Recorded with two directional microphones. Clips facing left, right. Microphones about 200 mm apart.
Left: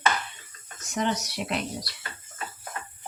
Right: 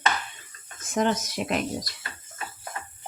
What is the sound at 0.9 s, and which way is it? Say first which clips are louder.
Speech: right 3 dB; 50° right (ahead or behind).